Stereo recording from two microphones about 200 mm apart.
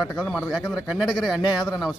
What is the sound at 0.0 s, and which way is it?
Speech, centre (ahead or behind).